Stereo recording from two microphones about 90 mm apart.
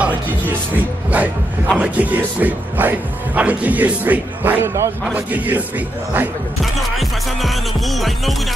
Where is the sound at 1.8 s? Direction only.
15° right (ahead or behind).